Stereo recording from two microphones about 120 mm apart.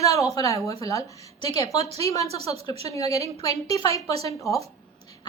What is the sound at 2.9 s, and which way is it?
A woman's voice, 30° left (ahead or behind).